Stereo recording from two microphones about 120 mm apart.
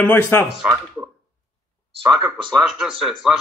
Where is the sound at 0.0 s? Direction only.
15° left (ahead or behind).